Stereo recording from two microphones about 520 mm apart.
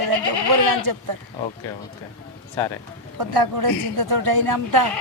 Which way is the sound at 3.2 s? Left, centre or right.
Right.